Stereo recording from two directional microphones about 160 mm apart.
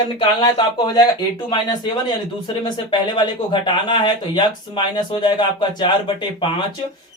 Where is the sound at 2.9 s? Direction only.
30° left (ahead or behind).